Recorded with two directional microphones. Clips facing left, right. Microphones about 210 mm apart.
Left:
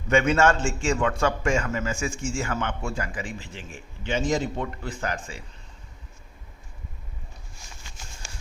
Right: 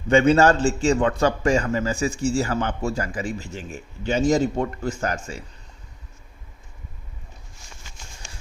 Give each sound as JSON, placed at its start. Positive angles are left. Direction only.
{"t": 0.1, "sound": "a man's voice", "side_deg": -35}